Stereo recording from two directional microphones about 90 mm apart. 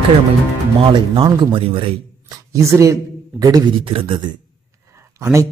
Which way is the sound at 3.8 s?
75° right (ahead or behind).